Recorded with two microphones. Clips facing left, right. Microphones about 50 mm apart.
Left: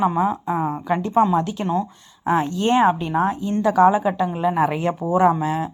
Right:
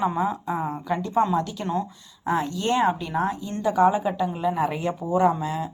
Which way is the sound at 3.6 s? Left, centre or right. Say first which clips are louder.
Left 4 dB; left.